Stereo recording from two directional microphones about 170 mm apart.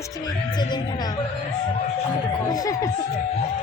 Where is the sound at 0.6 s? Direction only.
25° left (ahead or behind).